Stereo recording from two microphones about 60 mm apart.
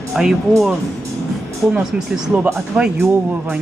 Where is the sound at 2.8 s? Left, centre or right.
Right.